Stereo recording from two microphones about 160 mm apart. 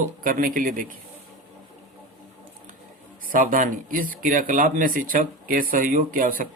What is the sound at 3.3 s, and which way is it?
Speech, 60° right (ahead or behind).